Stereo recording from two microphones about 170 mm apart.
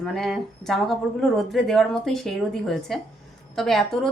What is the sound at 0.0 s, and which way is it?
Speech, centre (ahead or behind).